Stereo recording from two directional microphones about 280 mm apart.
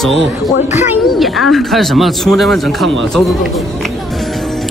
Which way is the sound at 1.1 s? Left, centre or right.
Centre.